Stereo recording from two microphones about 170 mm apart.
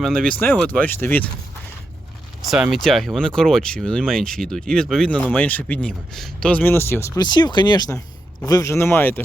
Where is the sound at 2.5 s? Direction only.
5° right (ahead or behind).